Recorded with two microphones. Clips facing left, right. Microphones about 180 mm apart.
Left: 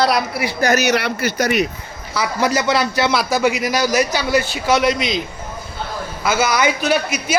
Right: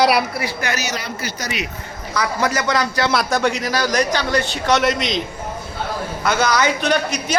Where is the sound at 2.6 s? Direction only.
25° left (ahead or behind).